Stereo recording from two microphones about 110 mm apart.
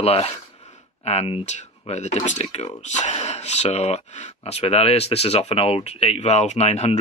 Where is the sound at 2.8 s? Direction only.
90° left.